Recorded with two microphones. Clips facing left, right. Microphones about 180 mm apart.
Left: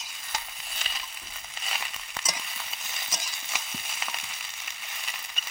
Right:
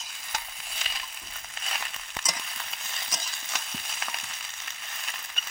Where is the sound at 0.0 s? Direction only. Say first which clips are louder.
Even; 5° left (ahead or behind).